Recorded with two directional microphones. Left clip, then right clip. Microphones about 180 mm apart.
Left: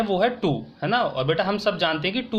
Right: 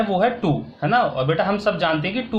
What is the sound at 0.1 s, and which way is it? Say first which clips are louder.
Speech: right 2 dB; 45° left (ahead or behind).